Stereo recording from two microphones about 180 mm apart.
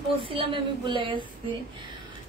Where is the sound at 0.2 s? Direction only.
30° right (ahead or behind).